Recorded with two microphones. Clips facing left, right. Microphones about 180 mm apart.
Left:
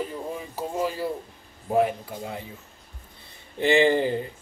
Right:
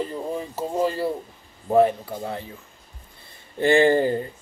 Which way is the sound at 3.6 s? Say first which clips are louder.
Right 2 dB; 50° right (ahead or behind).